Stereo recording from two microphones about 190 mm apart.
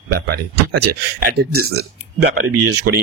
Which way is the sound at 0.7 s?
55° right (ahead or behind).